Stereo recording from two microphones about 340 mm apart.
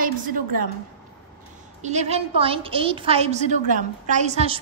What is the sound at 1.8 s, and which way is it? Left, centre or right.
A woman's voice, centre.